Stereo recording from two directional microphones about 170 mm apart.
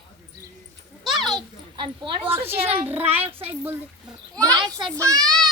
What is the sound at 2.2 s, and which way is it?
Speech, 15° right (ahead or behind).